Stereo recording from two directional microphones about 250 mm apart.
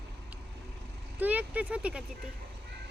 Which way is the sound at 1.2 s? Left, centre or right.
Centre.